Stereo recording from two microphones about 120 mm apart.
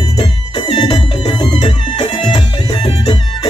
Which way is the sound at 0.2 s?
50° left (ahead or behind).